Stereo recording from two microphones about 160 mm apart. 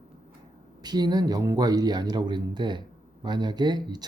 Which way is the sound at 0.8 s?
25° right (ahead or behind).